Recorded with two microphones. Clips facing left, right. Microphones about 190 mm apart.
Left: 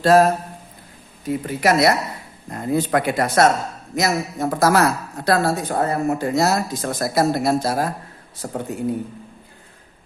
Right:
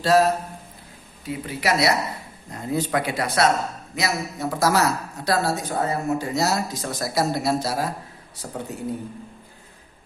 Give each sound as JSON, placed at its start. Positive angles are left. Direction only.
{"t": 0.0, "sound": "a man's voice", "side_deg": 50}